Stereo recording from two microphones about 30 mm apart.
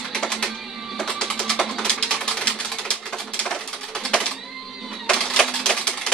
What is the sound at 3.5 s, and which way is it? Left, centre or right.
Bird, left.